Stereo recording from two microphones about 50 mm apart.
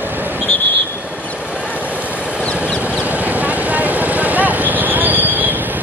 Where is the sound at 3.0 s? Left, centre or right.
Right.